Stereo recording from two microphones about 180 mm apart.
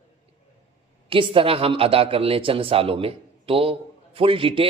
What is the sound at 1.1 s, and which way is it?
Speech, 30° right (ahead or behind).